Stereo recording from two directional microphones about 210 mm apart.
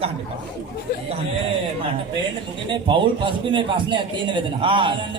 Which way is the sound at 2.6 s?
25° right (ahead or behind).